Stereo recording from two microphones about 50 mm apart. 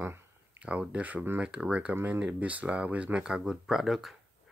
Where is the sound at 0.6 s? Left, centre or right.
Right.